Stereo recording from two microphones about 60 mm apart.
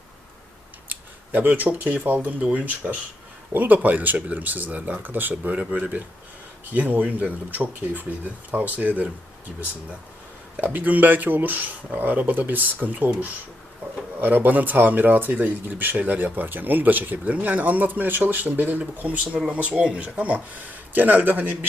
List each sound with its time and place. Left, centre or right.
0.9 s speech: right
10.6 s speech: right